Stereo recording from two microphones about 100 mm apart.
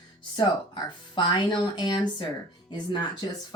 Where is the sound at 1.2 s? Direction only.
50° left (ahead or behind).